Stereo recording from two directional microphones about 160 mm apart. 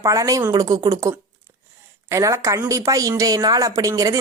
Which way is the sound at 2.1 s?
20° right (ahead or behind).